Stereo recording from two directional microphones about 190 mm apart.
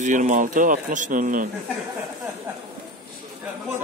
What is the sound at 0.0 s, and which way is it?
Speech, 40° right (ahead or behind).